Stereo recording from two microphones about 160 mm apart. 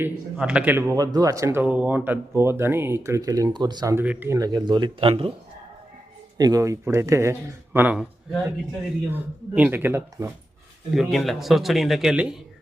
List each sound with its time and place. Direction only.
0.0 s speech: 5° right (ahead or behind); by 4.0 s 25° right (ahead or behind)
4.0 s speech: 10° right (ahead or behind); by 5.3 s 35° right (ahead or behind)
6.3 s speech: 25° right (ahead or behind)
10.9 s a man's voice: centre (ahead or behind)